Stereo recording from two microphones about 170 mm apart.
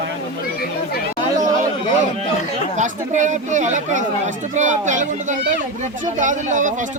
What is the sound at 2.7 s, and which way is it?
Speech, 45° right (ahead or behind).